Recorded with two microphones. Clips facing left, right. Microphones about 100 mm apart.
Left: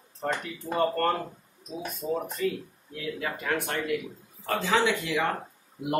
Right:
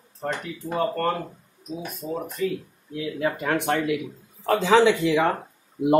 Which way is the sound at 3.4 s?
65° right (ahead or behind).